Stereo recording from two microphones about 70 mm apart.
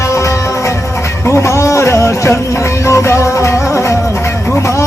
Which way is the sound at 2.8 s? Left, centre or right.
Left.